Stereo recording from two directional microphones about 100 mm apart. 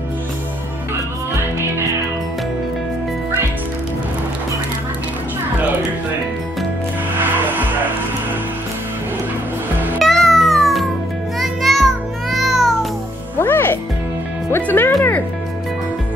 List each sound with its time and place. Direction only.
7.2 s music: 20° right (ahead or behind)
9.9 s music: centre (ahead or behind)
13.4 s music: 20° left (ahead or behind)